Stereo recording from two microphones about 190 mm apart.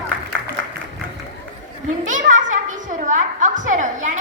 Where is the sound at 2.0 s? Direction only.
40° right (ahead or behind).